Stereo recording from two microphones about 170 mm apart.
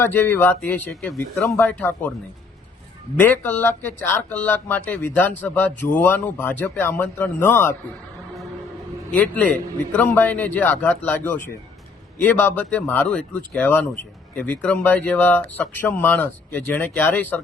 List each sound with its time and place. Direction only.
0.0 s speech: 10° left (ahead or behind)
1.0 s speech: centre (ahead or behind)
3.2 s speech: 10° left (ahead or behind)
9.1 s speech: 10° left (ahead or behind)